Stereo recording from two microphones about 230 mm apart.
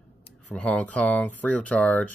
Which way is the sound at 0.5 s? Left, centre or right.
Centre.